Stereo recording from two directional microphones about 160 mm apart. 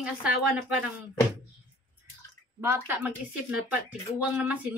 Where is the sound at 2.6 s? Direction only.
15° right (ahead or behind).